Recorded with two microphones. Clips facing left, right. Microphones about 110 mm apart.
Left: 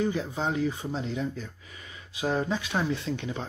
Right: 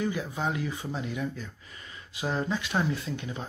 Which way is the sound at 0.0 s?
25° left (ahead or behind).